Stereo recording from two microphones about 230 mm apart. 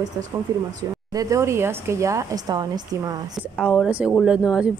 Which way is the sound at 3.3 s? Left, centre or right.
Centre.